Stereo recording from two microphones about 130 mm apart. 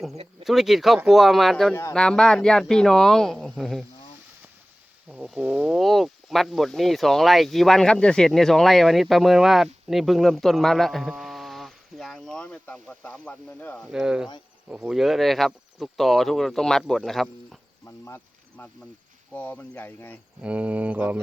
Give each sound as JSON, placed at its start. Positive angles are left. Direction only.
{"t": 0.4, "sound": "speech", "side_deg": 0}
{"t": 5.1, "sound": "speech", "side_deg": -5}
{"t": 13.8, "sound": "speech", "side_deg": -5}
{"t": 17.8, "sound": "insect", "side_deg": 20}
{"t": 19.3, "sound": "speech", "side_deg": 10}
{"t": 20.4, "sound": "speech", "side_deg": -10}